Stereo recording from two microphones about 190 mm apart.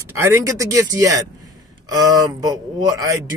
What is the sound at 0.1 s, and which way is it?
Speech, 15° right (ahead or behind).